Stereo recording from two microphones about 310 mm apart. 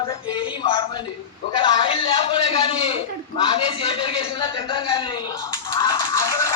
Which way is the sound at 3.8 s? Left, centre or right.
Centre.